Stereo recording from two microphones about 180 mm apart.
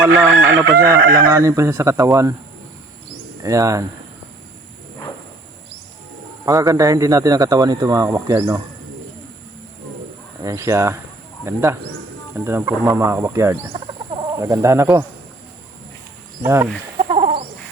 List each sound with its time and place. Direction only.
0.4 s crowing: 90° right
0.7 s speech: 15° right (ahead or behind)
3.4 s speech: 20° right (ahead or behind)
6.4 s a man's voice: 20° right (ahead or behind)
10.4 s speech: 15° right (ahead or behind)
16.4 s speech: 15° right (ahead or behind)
17.0 s chicken: 35° right (ahead or behind)